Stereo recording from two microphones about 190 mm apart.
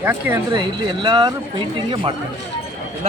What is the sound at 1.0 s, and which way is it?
Speech, 25° right (ahead or behind).